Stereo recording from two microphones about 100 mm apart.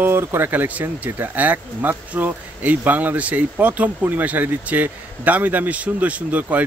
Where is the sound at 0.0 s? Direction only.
25° right (ahead or behind).